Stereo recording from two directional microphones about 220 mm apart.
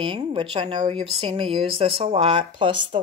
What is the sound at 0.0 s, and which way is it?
Speech, 25° right (ahead or behind).